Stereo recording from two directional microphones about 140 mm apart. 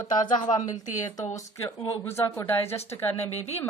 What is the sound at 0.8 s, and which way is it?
Speech, 60° left (ahead or behind).